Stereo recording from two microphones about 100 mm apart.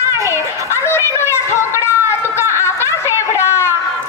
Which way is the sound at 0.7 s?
25° left (ahead or behind).